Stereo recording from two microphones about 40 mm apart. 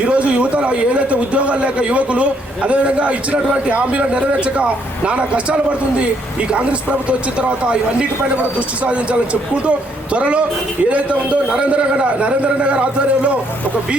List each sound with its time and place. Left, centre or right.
0.0 s a man's voice: right